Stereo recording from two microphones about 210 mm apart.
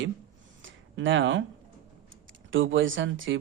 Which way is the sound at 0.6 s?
65° right (ahead or behind).